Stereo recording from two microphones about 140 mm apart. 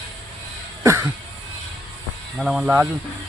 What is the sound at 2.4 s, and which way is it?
Speech, centre (ahead or behind).